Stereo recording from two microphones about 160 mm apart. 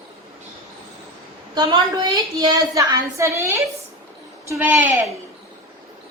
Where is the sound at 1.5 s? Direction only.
25° right (ahead or behind).